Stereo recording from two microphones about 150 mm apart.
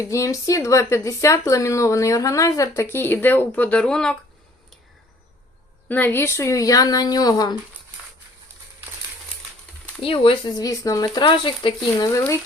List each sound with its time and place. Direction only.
0.0 s speech: 20° left (ahead or behind)
5.9 s speech: 10° left (ahead or behind)
10.0 s speech: 35° left (ahead or behind)